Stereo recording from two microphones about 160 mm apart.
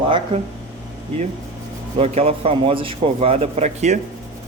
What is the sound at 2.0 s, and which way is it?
A man's voice, 40° right (ahead or behind).